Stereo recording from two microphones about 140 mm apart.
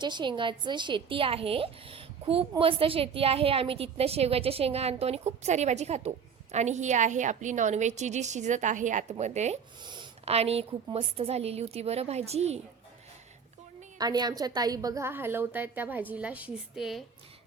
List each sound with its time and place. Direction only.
0.0 s a woman's voice: 35° right (ahead or behind); by 9.6 s 55° right (ahead or behind)
9.8 s a sound: 35° right (ahead or behind)
10.2 s a woman's voice: 45° right (ahead or behind)
14.0 s a woman's voice: 30° right (ahead or behind); by 17.0 s centre (ahead or behind)